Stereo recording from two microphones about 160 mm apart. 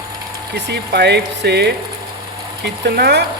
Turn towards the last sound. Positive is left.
turn(degrees=-90)